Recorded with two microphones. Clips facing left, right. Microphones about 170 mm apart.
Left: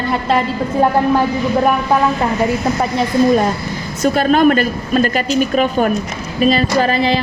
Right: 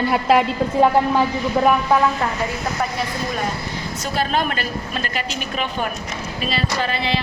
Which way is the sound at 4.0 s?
50° left (ahead or behind).